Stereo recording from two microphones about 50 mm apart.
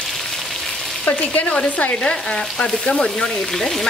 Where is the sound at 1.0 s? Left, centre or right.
Left.